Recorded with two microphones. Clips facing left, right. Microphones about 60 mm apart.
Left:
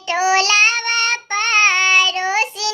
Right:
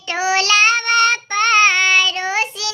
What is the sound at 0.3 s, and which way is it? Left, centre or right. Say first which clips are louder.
Child singing: right 1 dB; left.